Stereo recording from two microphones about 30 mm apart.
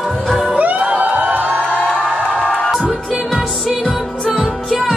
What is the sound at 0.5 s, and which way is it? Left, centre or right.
Music, right.